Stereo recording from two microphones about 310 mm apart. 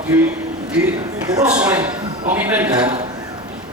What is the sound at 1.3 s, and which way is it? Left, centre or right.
A man's voice, centre.